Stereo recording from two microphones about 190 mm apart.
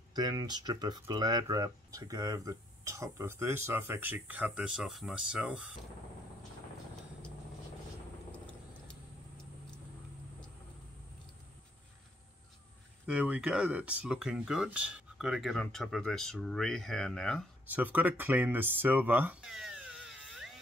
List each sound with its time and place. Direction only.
0.1 s speech: 20° right (ahead or behind); by 5.8 s 5° right (ahead or behind)
13.0 s speech: 5° right (ahead or behind)
17.6 s speech: 10° right (ahead or behind)